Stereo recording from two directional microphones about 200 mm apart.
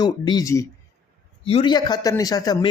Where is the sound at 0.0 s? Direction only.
20° left (ahead or behind).